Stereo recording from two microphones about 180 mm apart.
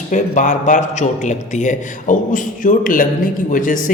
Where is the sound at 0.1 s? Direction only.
45° left (ahead or behind).